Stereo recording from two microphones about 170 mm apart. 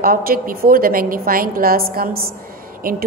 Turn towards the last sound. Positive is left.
turn(degrees=-60)  # may be behind; listen again after turning